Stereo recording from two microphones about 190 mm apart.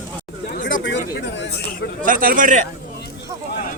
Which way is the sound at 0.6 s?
70° left (ahead or behind).